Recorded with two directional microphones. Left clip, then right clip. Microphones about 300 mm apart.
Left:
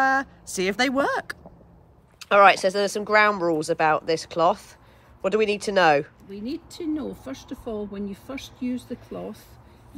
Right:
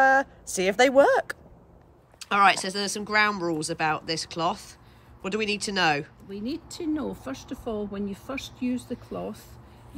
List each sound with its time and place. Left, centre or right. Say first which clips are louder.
0.0 s speech: right 2 dB; centre